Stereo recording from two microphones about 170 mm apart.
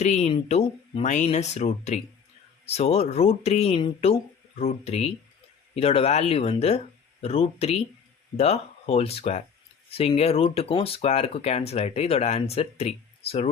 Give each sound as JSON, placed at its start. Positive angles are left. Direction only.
{"t": 0.0, "sound": "speech", "side_deg": 40}